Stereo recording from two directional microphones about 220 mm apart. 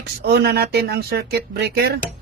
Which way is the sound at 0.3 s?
45° right (ahead or behind).